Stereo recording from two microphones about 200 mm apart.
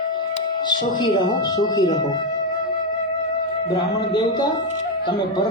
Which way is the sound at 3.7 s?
20° left (ahead or behind).